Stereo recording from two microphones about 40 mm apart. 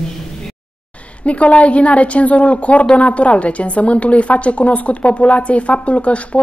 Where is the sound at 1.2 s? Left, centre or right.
Left.